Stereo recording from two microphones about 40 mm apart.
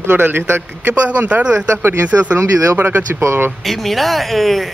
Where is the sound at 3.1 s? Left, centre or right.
Right.